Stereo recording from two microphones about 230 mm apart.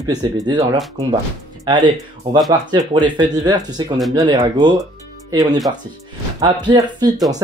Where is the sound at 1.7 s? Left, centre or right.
Centre.